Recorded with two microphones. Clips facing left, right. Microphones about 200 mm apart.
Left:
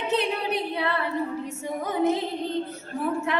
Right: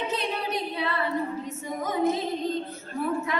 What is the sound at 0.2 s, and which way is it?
Singing, 65° left (ahead or behind).